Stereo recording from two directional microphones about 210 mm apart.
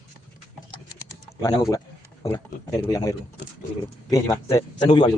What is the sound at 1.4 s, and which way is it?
Speech, 15° left (ahead or behind).